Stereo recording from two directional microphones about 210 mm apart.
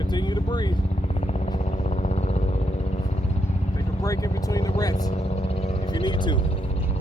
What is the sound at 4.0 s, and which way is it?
Vehicle, 15° left (ahead or behind).